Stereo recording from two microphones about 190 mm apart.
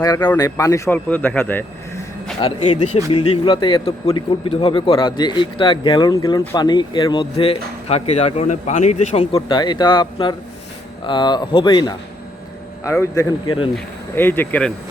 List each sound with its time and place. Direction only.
0.0 s speech: 15° left (ahead or behind)
2.4 s speech: 30° left (ahead or behind)
13.7 s speech: 10° left (ahead or behind)